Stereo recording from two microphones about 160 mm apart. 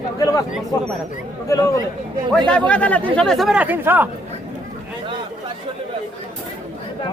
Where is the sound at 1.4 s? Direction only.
20° left (ahead or behind).